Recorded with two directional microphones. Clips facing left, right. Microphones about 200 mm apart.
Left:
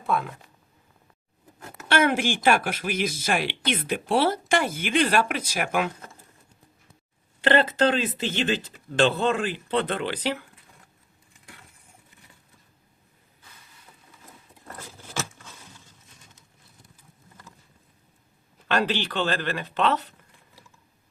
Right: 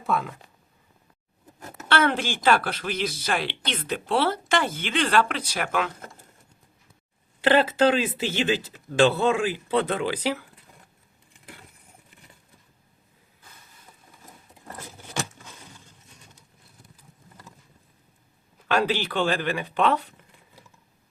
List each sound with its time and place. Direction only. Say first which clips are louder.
0.0 s speech: even; centre (ahead or behind)
1.9 s speech: left 1 dB; 10° left (ahead or behind)
7.4 s speech: right 1 dB; 10° right (ahead or behind)
15.1 s a sound: right 1 dB; 15° right (ahead or behind)
18.7 s speech: right 1 dB; 10° right (ahead or behind)